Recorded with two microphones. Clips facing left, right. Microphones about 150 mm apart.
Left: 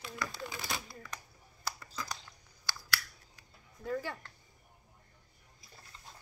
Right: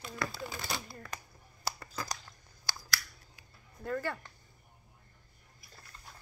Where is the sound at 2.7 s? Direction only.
40° right (ahead or behind).